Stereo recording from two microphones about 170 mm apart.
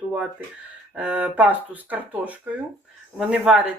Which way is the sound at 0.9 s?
10° right (ahead or behind).